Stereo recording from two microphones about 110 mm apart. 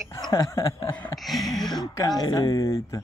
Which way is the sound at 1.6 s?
35° left (ahead or behind).